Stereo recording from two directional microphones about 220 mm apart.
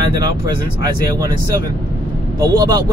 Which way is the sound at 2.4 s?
20° right (ahead or behind).